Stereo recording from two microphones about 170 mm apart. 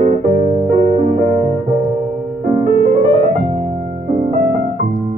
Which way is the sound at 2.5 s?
45° right (ahead or behind).